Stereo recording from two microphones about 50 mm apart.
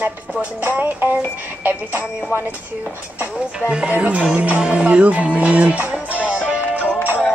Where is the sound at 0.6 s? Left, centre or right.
Right.